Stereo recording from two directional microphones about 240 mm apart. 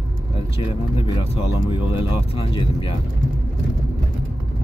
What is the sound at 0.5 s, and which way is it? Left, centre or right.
Speech, centre.